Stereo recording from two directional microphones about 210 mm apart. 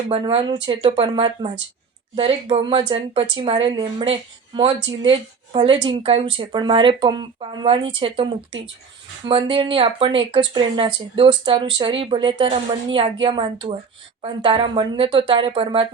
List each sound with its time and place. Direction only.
0.1 s speech: 25° right (ahead or behind)